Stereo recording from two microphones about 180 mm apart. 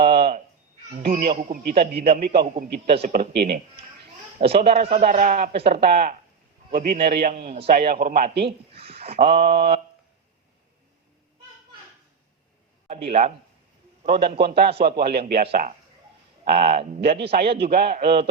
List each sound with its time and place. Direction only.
0.0 s a sound: 60° right (ahead or behind)
1.0 s a man's voice: 55° right (ahead or behind)
4.6 s speech: 35° right (ahead or behind)
5.0 s speech: 50° right (ahead or behind)
5.5 s speech: 30° right (ahead or behind)
5.8 s a man's voice: 55° right (ahead or behind)
8.7 s speech: 35° right (ahead or behind)
9.4 s a man's voice: 65° right (ahead or behind)
12.9 s a man's voice: 35° right (ahead or behind)
14.1 s a man's voice: 60° right (ahead or behind)